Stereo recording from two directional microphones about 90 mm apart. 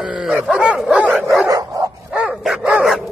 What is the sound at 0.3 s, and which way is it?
Dog, 15° right (ahead or behind).